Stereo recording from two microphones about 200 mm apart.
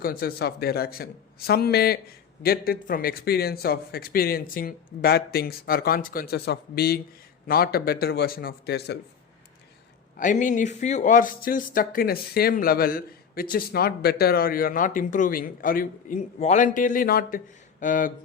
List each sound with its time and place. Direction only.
0.0 s speech: 50° left (ahead or behind)
10.2 s speech: 40° left (ahead or behind)